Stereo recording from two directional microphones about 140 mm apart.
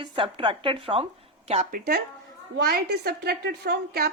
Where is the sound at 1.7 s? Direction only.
90° right.